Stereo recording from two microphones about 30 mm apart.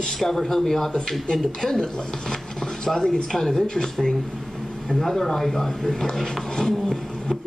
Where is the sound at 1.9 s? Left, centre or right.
Left.